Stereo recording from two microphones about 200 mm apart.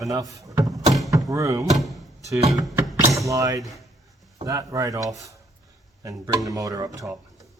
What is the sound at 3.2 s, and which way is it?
Speech, 15° right (ahead or behind).